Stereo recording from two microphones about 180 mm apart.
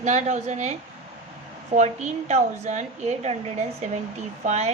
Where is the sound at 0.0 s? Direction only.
40° right (ahead or behind).